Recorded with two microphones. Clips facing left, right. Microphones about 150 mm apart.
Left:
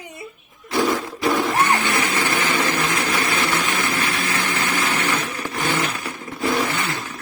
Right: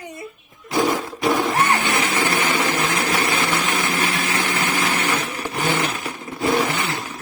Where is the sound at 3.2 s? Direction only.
20° right (ahead or behind).